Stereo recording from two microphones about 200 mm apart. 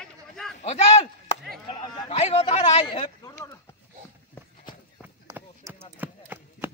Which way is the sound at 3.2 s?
15° left (ahead or behind).